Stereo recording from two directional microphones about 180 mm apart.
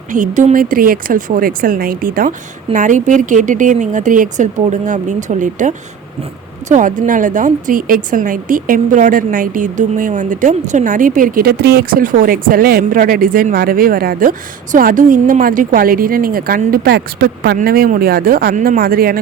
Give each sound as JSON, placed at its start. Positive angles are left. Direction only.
{"t": 0.1, "sound": "speech", "side_deg": -45}